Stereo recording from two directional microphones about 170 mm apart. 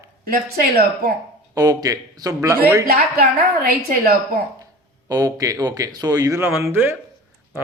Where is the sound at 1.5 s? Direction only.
20° right (ahead or behind).